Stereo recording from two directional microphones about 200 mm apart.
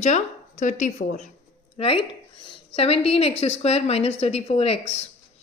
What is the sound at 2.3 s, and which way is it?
A woman's voice, 25° left (ahead or behind).